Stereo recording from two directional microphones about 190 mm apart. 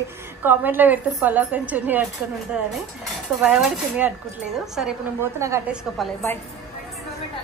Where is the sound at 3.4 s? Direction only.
5° right (ahead or behind).